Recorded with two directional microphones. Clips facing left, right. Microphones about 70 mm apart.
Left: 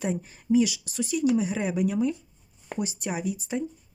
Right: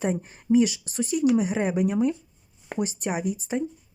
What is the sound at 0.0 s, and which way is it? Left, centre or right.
Speech, right.